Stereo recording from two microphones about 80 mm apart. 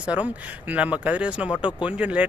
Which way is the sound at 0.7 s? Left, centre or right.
Centre.